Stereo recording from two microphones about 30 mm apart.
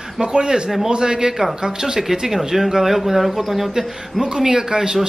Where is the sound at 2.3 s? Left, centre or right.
Centre.